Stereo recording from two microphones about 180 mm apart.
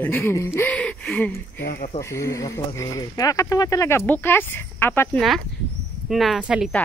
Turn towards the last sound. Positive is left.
turn(degrees=-5)  # may be behind; listen again after turning